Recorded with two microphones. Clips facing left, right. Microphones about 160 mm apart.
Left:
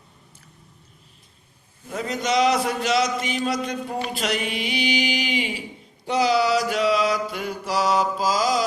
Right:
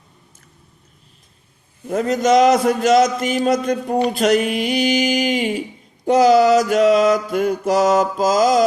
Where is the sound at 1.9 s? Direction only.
45° right (ahead or behind).